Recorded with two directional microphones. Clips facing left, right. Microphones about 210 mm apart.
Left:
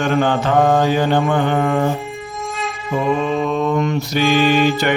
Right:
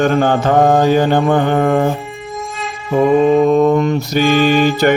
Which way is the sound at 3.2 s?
45° right (ahead or behind).